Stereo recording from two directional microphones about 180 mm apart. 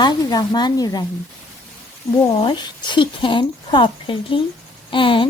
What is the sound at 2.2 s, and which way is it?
Speech, 25° left (ahead or behind).